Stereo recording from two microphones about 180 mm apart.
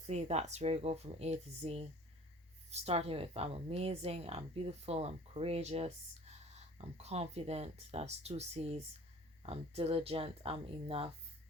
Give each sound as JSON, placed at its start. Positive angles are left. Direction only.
{"t": 0.0, "sound": "speech", "side_deg": -35}